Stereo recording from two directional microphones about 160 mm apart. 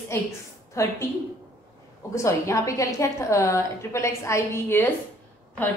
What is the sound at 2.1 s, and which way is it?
A woman's voice, 20° left (ahead or behind).